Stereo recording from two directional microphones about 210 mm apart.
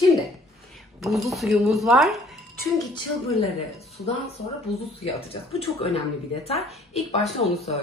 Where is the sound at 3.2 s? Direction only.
30° left (ahead or behind).